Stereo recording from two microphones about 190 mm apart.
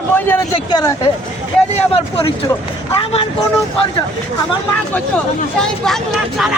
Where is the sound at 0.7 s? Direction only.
20° left (ahead or behind).